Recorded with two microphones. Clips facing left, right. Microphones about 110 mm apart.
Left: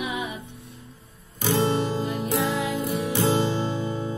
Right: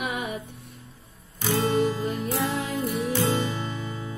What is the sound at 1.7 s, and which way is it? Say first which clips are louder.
Music: right 1 dB; 25° left (ahead or behind).